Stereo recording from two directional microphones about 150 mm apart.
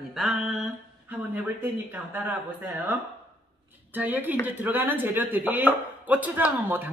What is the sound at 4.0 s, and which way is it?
Speech, 10° right (ahead or behind).